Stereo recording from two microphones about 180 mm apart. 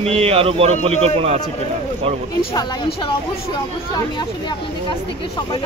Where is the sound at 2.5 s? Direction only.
25° left (ahead or behind).